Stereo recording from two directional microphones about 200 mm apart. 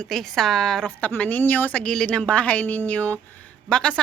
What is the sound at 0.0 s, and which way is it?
A woman's voice, centre (ahead or behind).